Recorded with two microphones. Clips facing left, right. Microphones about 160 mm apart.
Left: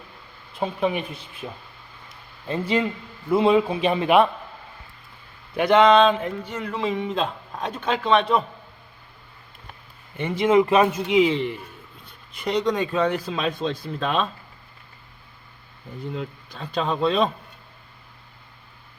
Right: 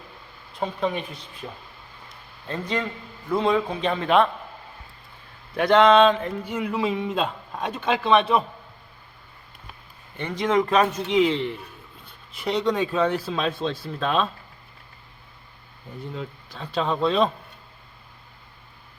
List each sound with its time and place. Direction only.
0.6 s a man's voice: 5° left (ahead or behind)
5.5 s speech: centre (ahead or behind)
10.2 s speech: 5° left (ahead or behind)
16.1 s speech: centre (ahead or behind)